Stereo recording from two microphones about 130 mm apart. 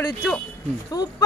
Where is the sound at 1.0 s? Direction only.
30° left (ahead or behind).